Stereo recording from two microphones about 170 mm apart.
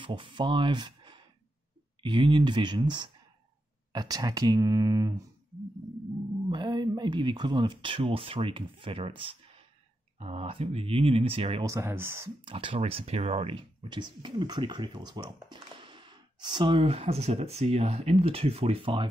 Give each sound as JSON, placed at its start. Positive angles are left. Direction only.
{"t": 0.0, "sound": "speech", "side_deg": -30}
{"t": 6.5, "sound": "speech", "side_deg": -25}
{"t": 11.6, "sound": "speech", "side_deg": -15}
{"t": 12.4, "sound": "speech", "side_deg": -30}